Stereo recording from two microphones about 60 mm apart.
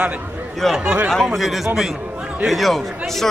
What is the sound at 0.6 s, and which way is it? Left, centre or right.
Speech, centre.